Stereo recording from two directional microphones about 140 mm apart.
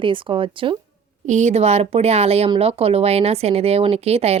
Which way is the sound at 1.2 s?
60° right (ahead or behind).